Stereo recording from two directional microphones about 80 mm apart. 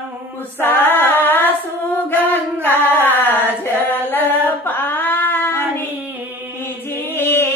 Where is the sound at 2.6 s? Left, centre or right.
Left.